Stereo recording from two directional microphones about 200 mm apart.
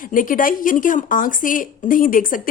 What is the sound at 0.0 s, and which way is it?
A woman's voice, 40° left (ahead or behind).